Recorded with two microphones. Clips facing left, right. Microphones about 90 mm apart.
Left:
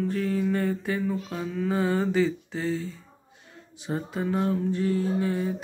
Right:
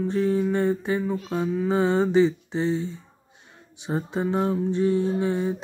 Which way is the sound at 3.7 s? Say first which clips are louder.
Right 3 dB; 20° right (ahead or behind).